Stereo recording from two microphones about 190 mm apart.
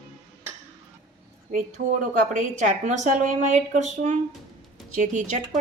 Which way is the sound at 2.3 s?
40° right (ahead or behind).